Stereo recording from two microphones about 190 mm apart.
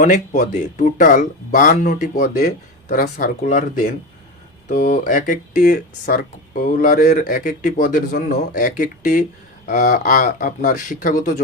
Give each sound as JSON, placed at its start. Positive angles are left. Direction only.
{"t": 0.0, "sound": "speech", "side_deg": 40}